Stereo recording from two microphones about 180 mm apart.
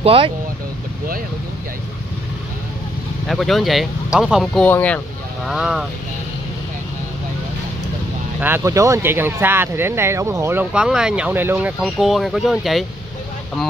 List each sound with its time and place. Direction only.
0.0 s speech: 30° right (ahead or behind)
3.3 s speech: centre (ahead or behind)
4.6 s speech: 10° left (ahead or behind)
5.5 s speech: 5° right (ahead or behind)
8.4 s speech: 10° right (ahead or behind)